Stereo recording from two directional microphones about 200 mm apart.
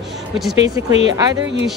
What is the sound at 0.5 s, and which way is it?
Speech, 15° right (ahead or behind).